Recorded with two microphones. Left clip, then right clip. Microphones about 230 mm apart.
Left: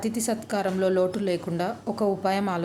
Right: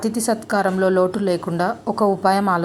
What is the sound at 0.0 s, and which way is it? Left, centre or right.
A woman's voice, centre.